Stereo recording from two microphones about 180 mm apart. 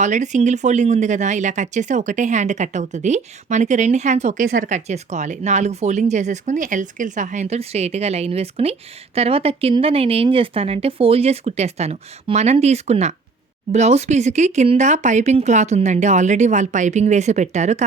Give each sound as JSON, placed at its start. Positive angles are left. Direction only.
{"t": 0.0, "sound": "speech", "side_deg": -40}